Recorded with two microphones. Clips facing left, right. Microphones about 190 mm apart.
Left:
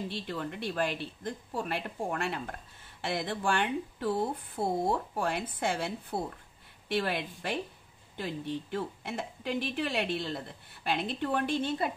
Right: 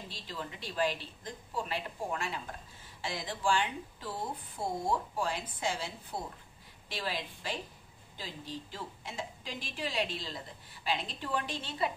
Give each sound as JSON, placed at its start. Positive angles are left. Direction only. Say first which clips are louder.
{"t": 0.1, "sound": "a woman's voice", "louder": "left 7 dB", "side_deg": 60}